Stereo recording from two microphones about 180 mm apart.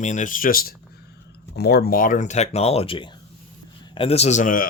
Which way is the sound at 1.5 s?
65° left (ahead or behind).